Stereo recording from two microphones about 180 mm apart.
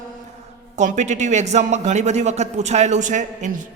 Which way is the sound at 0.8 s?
40° right (ahead or behind).